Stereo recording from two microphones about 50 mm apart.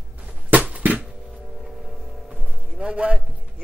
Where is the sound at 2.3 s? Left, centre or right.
Centre.